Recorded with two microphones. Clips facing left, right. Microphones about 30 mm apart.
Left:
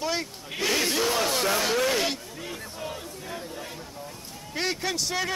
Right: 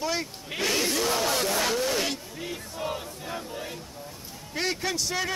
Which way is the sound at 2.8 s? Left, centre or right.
Centre.